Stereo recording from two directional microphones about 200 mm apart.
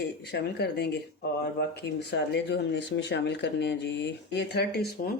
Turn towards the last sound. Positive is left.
turn(degrees=55)  # may be behind; listen again after turning